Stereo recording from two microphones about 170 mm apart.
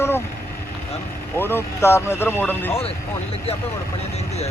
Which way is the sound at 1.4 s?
15° left (ahead or behind).